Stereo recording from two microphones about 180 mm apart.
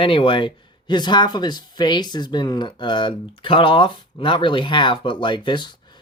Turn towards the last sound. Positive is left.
turn(degrees=25)  # may be behind; listen again after turning